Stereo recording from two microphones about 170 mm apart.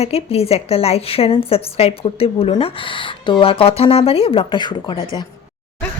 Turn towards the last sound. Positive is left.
turn(degrees=25)  # may be behind; listen again after turning